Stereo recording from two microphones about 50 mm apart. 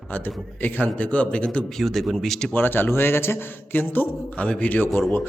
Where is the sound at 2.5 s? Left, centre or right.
Left.